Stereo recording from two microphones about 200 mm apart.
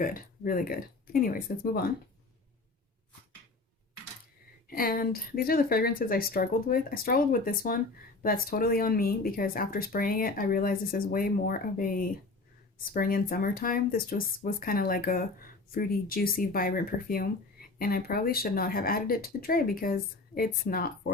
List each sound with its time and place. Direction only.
0.0 s speech: 45° left (ahead or behind)
4.7 s speech: 45° left (ahead or behind)